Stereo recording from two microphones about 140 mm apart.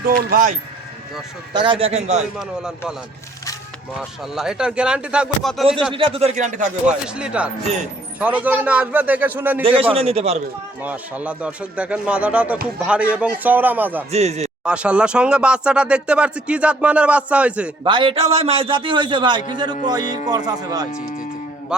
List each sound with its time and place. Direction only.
0.2 s speech: 85° right
1.5 s speech: 35° right (ahead or behind)
2.4 s speech: 5° right (ahead or behind)
4.2 s speech: 5° right (ahead or behind)
5.9 s speech: 40° right (ahead or behind); by 6.7 s 65° right (ahead or behind)
6.8 s speech: 5° right (ahead or behind)
9.9 s speech: 45° right (ahead or behind)
10.8 s speech: 10° right (ahead or behind)
14.1 s speech: 50° right (ahead or behind)
14.6 s speech: 10° right (ahead or behind)
17.8 s a man's voice: 35° right (ahead or behind)
21.7 s mantra: 5° right (ahead or behind)